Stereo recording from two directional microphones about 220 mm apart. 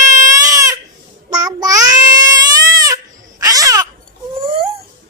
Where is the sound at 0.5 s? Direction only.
15° right (ahead or behind).